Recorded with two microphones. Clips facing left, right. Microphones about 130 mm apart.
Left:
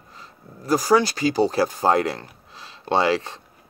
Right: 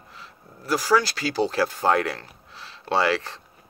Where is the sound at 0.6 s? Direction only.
15° left (ahead or behind).